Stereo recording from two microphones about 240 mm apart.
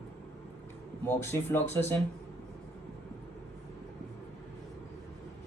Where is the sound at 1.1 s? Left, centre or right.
Centre.